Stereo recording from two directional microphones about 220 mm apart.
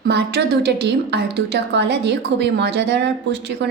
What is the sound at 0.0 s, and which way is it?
A woman's voice, 50° right (ahead or behind).